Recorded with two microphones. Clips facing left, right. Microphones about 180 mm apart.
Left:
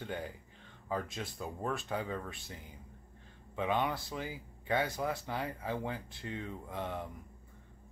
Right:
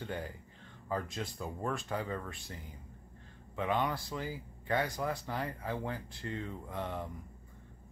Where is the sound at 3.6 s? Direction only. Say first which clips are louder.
Even; 15° left (ahead or behind).